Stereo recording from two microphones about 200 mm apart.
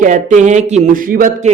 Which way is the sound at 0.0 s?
40° right (ahead or behind).